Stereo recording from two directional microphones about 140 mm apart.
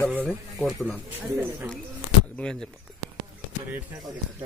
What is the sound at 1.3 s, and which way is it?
Speech, 15° right (ahead or behind).